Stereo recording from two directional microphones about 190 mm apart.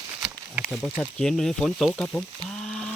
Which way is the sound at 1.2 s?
5° left (ahead or behind).